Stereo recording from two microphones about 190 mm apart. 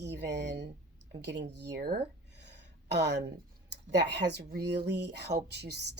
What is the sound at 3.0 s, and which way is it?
Speech, 60° right (ahead or behind).